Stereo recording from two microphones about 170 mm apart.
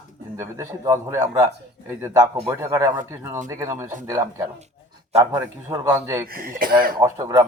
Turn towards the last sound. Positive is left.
turn(degrees=-20)  # may be behind; listen again after turning